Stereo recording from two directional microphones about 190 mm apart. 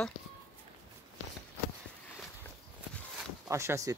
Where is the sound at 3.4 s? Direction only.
15° right (ahead or behind).